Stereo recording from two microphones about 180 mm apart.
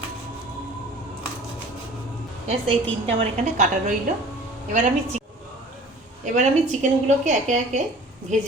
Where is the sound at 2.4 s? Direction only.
35° right (ahead or behind).